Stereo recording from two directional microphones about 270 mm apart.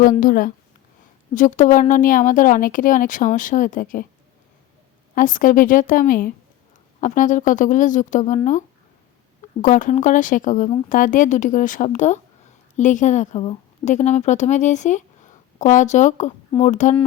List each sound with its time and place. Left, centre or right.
0.0 s speech: left
5.1 s speech: left
9.6 s speech: left